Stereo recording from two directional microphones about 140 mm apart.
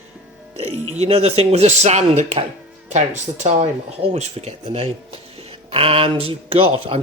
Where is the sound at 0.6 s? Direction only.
50° right (ahead or behind).